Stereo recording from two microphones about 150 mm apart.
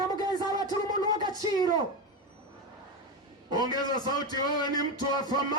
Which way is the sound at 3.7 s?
25° left (ahead or behind).